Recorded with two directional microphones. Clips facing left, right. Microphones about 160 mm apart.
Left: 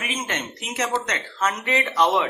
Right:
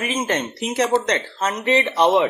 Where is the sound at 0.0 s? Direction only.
35° right (ahead or behind).